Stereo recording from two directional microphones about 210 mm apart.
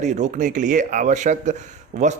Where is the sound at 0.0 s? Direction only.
35° right (ahead or behind).